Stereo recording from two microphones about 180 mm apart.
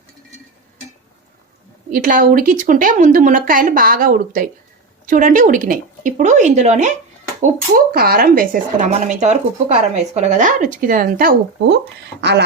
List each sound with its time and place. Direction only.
1.9 s speech: 50° right (ahead or behind)
7.9 s speech: 55° right (ahead or behind)